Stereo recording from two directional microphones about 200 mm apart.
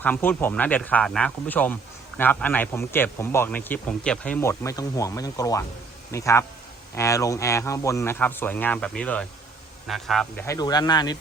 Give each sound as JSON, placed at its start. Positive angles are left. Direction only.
{"t": 0.0, "sound": "a man's voice", "side_deg": 10}
{"t": 10.4, "sound": "speech", "side_deg": 15}